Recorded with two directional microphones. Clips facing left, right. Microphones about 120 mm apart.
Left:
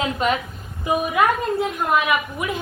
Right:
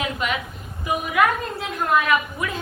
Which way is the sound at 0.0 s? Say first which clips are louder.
Left 4 dB; 35° left (ahead or behind).